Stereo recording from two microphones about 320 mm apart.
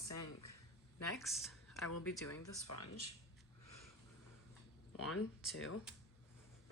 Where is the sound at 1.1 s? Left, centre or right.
Centre.